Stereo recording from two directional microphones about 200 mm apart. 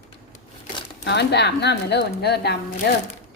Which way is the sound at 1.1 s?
60° left (ahead or behind).